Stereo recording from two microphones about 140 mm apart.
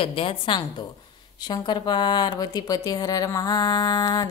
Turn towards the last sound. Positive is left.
turn(degrees=30)  # may be behind; listen again after turning